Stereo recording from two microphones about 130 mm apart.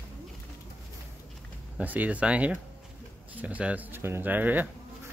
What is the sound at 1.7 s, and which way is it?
Speech, 10° right (ahead or behind).